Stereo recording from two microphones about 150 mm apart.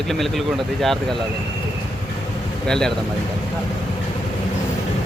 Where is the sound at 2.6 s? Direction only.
5° left (ahead or behind).